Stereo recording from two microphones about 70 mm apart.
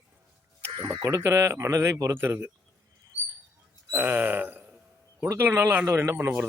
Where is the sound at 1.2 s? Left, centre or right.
Right.